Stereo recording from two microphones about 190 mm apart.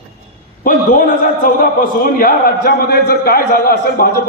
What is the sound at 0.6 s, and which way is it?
A man's voice, 45° left (ahead or behind).